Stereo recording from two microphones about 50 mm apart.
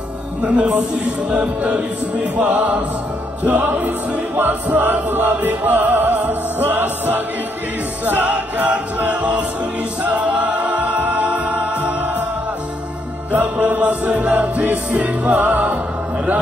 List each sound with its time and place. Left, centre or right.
0.4 s a man's voice: right
1.3 s music: right
9.1 s music: right
13.3 s music: right